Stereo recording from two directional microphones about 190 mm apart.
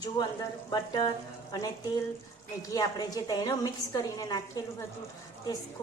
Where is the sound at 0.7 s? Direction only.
20° left (ahead or behind).